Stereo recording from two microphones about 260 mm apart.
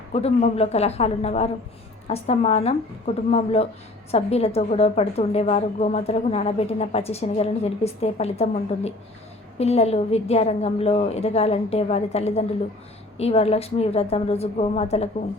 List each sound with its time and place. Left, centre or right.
0.1 s a woman's voice: left